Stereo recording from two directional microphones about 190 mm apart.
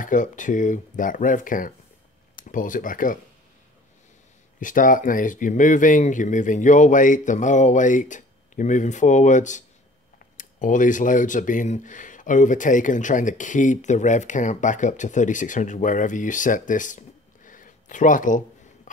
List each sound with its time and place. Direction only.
0.0 s speech: 45° left (ahead or behind)
4.6 s speech: 45° left (ahead or behind)
17.5 s a sound: 45° left (ahead or behind)